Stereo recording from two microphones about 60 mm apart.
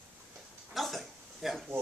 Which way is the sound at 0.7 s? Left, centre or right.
Centre.